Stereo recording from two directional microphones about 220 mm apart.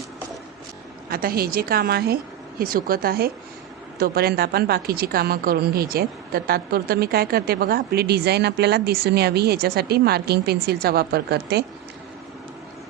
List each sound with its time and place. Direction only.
1.1 s a woman's voice: 40° right (ahead or behind)